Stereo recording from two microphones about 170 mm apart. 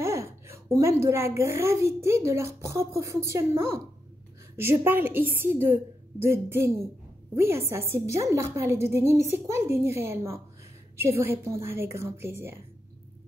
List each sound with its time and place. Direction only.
0.0 s a woman's voice: 15° right (ahead or behind)